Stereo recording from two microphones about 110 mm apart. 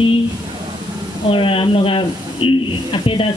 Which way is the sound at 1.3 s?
50° left (ahead or behind).